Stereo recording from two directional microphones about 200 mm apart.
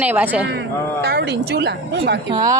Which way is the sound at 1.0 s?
55° right (ahead or behind).